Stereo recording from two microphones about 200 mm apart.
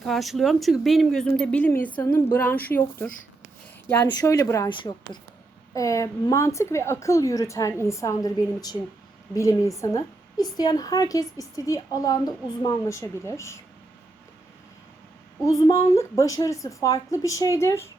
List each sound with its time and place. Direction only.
0.0 s a woman's voice: centre (ahead or behind)
4.0 s a woman's voice: 20° left (ahead or behind)
15.4 s a woman's voice: 15° left (ahead or behind)